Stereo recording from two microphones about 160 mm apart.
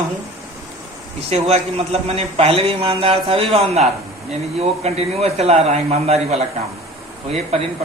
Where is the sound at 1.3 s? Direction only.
40° right (ahead or behind).